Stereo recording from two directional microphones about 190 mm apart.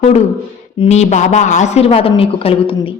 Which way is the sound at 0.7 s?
35° left (ahead or behind).